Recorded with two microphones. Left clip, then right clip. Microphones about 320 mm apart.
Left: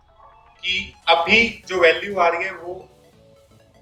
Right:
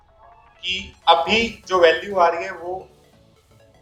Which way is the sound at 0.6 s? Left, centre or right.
Centre.